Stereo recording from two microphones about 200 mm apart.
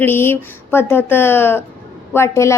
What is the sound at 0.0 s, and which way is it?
A woman's voice, 10° left (ahead or behind).